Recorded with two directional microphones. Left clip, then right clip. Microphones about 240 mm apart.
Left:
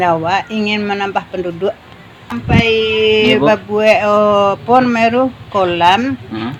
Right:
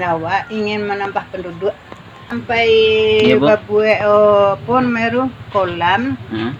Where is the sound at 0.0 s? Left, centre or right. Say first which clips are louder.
Left 4 dB; left.